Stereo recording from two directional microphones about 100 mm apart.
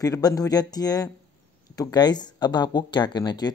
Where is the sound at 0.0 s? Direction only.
35° left (ahead or behind).